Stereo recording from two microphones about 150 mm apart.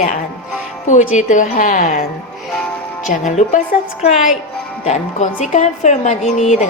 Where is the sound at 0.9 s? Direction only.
55° left (ahead or behind); by 2.0 s 70° left (ahead or behind).